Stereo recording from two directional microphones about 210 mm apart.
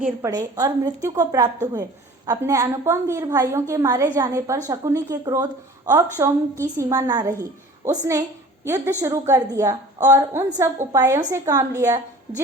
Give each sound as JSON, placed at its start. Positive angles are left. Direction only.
{"t": 0.0, "sound": "a woman's voice", "side_deg": -15}